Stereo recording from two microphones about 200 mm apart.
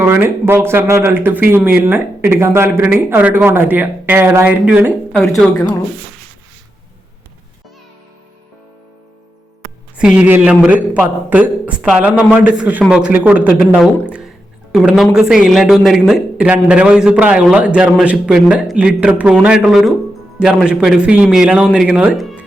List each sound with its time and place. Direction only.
0.0 s speech: 10° right (ahead or behind)
5.1 s a woman's voice: 10° left (ahead or behind)
10.0 s a man's voice: 5° right (ahead or behind)